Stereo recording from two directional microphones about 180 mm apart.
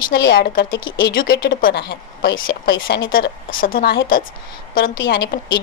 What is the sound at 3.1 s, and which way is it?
Speech, 50° left (ahead or behind).